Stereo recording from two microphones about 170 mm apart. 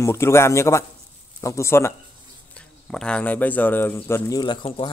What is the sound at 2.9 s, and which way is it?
Speech, 5° left (ahead or behind).